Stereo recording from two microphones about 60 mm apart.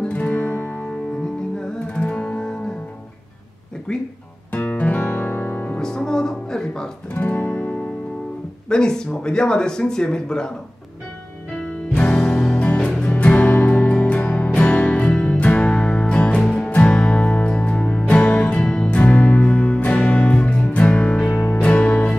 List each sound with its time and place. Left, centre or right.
0.0 s music: left
1.6 s music: centre
3.9 s speech: centre
4.5 s guitar: left
5.0 s music: left
5.8 s music: centre
7.2 s music: left
8.6 s speech: centre
11.6 s music: left
18.9 s music: left